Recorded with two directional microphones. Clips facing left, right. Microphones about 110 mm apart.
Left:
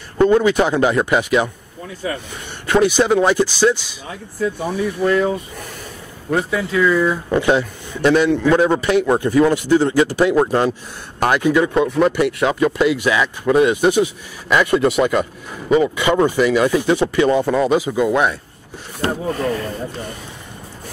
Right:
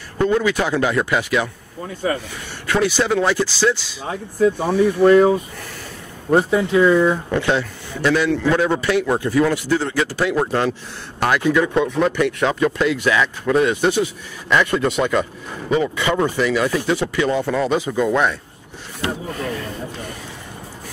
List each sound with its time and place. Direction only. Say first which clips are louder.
0.2 s a man's voice: left 5 dB; 25° left (ahead or behind)
2.6 s speech: left 4 dB; 20° left (ahead or behind)
4.0 s speech: right 5 dB; 50° right (ahead or behind)
6.3 s speech: right 3 dB; 30° right (ahead or behind)
7.2 s a man's voice: left 3 dB; 15° left (ahead or behind)
18.9 s speech: left 5 dB; 40° left (ahead or behind)